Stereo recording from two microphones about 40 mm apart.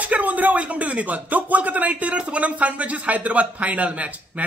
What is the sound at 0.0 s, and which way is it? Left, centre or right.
Speech, right.